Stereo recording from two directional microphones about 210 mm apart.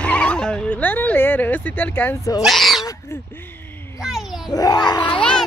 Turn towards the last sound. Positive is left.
turn(degrees=5)  # may be behind; listen again after turning